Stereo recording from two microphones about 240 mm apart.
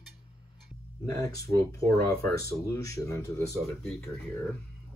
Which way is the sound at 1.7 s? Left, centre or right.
Centre.